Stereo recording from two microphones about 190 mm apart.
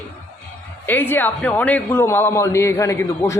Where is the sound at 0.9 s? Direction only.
10° left (ahead or behind).